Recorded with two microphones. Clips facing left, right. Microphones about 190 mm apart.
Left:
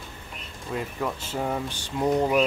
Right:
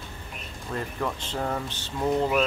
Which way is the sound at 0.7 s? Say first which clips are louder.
Left 1 dB; 10° left (ahead or behind).